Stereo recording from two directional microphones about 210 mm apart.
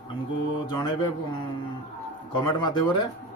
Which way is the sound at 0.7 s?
20° left (ahead or behind).